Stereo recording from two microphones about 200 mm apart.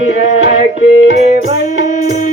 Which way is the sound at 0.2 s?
65° left (ahead or behind).